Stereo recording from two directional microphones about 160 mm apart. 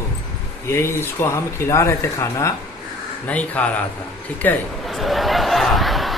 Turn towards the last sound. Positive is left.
turn(degrees=0)  # may be behind; listen again after turning